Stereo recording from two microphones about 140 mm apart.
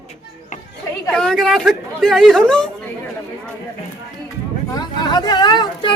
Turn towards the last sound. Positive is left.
turn(degrees=35)  # may be behind; listen again after turning